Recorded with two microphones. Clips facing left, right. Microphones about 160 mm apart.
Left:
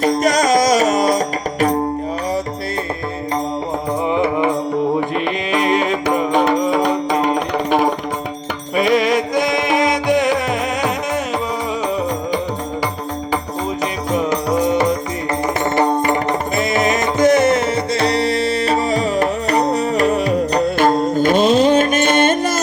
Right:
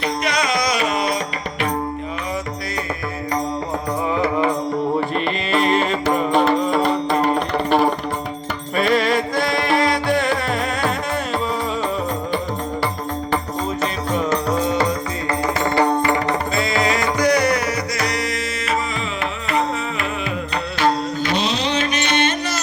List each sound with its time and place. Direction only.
0.0 s music: 40° left (ahead or behind)
4.1 s music: 20° left (ahead or behind)
14.1 s music: 15° left (ahead or behind); by 22.6 s 50° left (ahead or behind)